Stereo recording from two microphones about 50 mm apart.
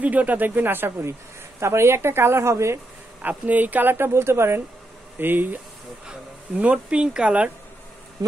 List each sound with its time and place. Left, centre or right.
0.0 s speech: right
1.6 s speech: right
3.2 s speech: right
3.9 s speech: right
5.2 s speech: right
6.0 s speech: right